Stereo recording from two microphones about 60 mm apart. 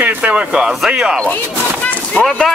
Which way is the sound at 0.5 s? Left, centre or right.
Centre.